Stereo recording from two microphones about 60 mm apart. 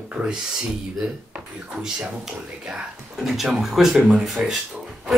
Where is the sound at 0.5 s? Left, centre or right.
Centre.